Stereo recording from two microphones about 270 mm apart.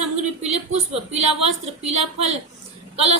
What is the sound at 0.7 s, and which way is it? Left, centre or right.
A woman's voice, right.